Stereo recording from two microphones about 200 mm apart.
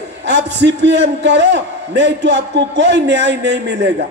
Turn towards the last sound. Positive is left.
turn(degrees=-60)  # may be behind; listen again after turning